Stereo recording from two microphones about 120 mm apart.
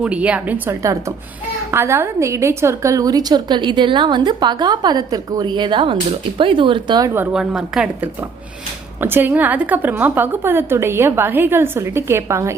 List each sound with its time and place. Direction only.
0.0 s a woman's voice: 10° right (ahead or behind)
0.8 s a woman's voice: 25° right (ahead or behind)
7.3 s speech: 5° right (ahead or behind)
9.0 s a woman's voice: 15° right (ahead or behind)